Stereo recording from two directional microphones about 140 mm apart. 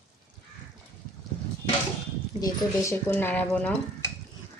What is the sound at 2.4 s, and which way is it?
Speech, 25° left (ahead or behind).